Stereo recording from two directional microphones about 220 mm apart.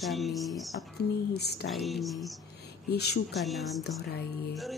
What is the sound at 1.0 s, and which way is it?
Speech, 45° left (ahead or behind).